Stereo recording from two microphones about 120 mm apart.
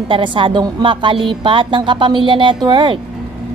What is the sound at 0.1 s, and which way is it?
Speech, 45° right (ahead or behind).